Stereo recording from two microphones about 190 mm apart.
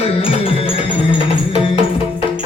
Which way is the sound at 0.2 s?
30° left (ahead or behind).